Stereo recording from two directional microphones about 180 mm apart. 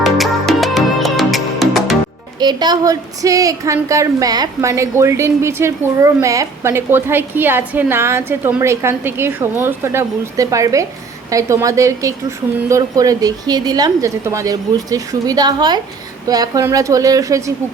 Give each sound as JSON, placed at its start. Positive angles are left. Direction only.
{"t": 0.0, "sound": "music", "side_deg": 0}
{"t": 2.4, "sound": "a woman's voice", "side_deg": -25}